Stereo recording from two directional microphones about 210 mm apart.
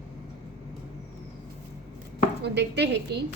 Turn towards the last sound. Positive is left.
turn(degrees=-55)  # may be behind; listen again after turning